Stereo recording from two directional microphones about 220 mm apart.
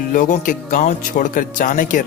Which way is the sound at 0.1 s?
35° left (ahead or behind).